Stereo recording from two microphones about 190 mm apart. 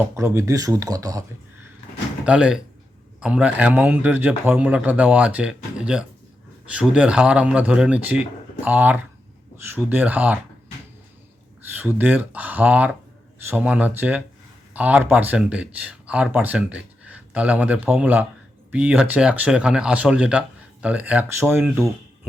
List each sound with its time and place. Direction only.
0.0 s speech: 15° right (ahead or behind)
2.2 s speech: 5° right (ahead or behind)
11.8 s speech: 10° right (ahead or behind)